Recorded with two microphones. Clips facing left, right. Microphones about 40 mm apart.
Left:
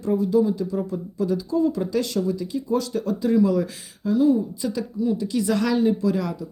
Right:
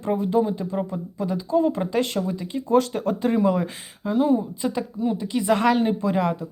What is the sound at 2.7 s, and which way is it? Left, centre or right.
Speech, right.